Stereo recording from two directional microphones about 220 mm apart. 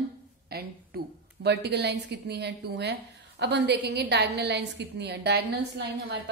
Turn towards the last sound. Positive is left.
turn(degrees=-50)  # may be behind; listen again after turning